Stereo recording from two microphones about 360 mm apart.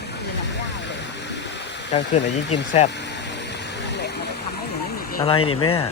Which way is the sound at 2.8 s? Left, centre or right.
Centre.